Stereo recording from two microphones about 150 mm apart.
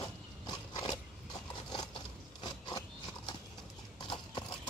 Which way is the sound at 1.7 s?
30° left (ahead or behind).